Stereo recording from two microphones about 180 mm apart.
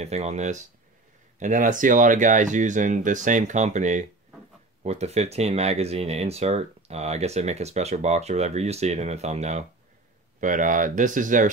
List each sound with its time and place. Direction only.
0.0 s speech: 40° right (ahead or behind)